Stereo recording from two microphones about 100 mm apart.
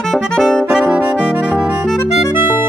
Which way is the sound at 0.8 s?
15° right (ahead or behind).